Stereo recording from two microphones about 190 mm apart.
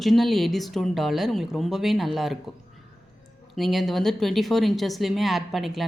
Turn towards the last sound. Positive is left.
turn(degrees=0)  # may be behind; listen again after turning